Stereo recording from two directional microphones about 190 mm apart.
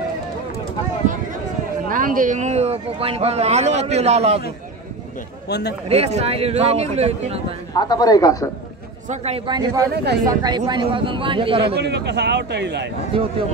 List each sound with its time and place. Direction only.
1.9 s a man's voice: 45° right (ahead or behind)
5.5 s a man's voice: 60° left (ahead or behind)
5.9 s a man's voice: 35° right (ahead or behind)
7.7 s a man's voice: 20° left (ahead or behind)
9.1 s a man's voice: 35° right (ahead or behind)
11.7 s speech: 60° right (ahead or behind)